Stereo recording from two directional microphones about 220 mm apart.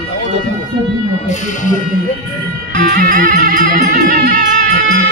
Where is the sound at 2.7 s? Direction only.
40° right (ahead or behind).